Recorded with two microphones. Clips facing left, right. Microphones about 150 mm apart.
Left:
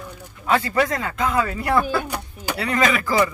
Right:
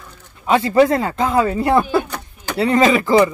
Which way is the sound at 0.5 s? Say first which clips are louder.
Right 7 dB; 25° right (ahead or behind).